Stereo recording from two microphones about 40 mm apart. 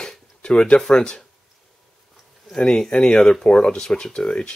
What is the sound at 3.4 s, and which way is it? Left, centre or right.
Speech, centre.